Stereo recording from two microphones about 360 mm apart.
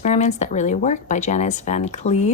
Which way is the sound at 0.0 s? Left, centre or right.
Centre.